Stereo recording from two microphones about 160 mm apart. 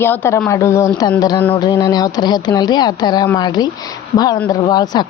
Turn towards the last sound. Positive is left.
turn(degrees=25)  # may be behind; listen again after turning